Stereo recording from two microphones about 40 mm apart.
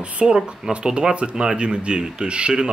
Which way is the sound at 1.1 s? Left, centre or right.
Right.